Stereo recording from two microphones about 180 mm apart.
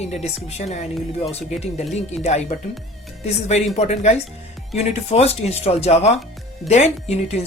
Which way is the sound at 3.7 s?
40° left (ahead or behind).